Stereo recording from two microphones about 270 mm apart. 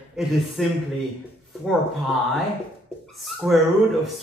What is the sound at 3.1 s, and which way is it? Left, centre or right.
Speech, centre.